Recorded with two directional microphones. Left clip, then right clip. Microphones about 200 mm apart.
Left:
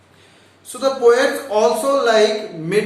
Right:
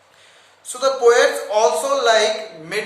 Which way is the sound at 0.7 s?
20° right (ahead or behind).